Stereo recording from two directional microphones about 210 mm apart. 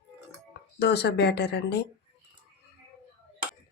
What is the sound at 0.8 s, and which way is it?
Speech, 50° left (ahead or behind).